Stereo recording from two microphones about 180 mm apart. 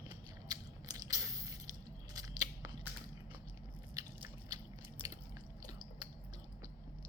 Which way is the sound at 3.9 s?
15° right (ahead or behind).